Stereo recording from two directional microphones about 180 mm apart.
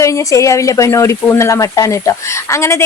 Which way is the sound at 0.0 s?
15° left (ahead or behind).